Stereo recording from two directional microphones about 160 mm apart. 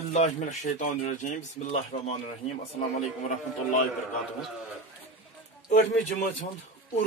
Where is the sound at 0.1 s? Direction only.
45° left (ahead or behind).